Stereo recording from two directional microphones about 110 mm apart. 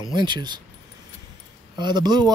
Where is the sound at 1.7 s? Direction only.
40° right (ahead or behind).